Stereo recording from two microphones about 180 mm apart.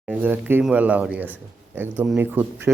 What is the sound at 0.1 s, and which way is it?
A man's voice, 10° right (ahead or behind).